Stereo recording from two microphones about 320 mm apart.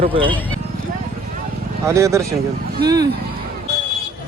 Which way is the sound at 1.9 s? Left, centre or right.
Centre.